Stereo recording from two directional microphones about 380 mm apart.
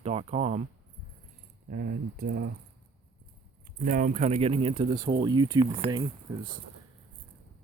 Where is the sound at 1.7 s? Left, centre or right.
Right.